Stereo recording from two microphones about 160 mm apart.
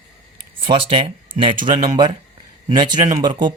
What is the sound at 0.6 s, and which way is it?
Speech, 35° right (ahead or behind).